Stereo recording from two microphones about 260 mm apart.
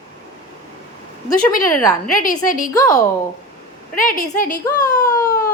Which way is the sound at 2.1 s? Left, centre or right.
Left.